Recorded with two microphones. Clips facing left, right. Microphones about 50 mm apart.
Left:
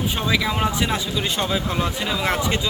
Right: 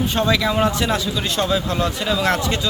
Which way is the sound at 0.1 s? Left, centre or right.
Centre.